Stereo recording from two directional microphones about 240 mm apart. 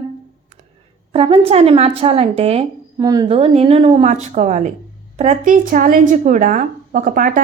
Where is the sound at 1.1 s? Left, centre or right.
Right.